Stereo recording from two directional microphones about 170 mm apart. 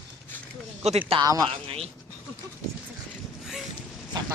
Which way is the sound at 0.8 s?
35° right (ahead or behind).